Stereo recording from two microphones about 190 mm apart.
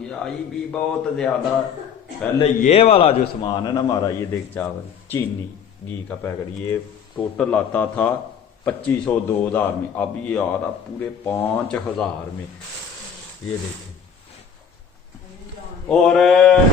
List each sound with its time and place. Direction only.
0.0 s a man's voice: 5° left (ahead or behind)
2.4 s a man's voice: 30° left (ahead or behind); by 12.1 s 10° left (ahead or behind)
13.4 s a man's voice: 5° left (ahead or behind)
15.9 s a man's voice: centre (ahead or behind)